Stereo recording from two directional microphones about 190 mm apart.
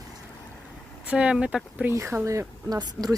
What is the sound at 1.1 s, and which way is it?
Speech, 5° right (ahead or behind).